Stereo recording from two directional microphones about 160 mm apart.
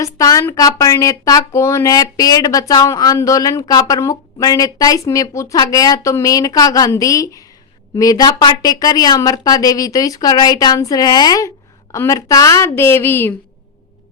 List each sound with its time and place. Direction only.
0.0 s speech: 20° left (ahead or behind)